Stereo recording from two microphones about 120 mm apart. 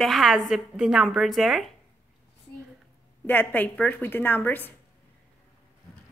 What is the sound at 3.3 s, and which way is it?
A woman's voice, 15° left (ahead or behind).